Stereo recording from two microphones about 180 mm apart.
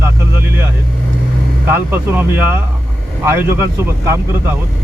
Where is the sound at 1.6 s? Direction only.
10° right (ahead or behind).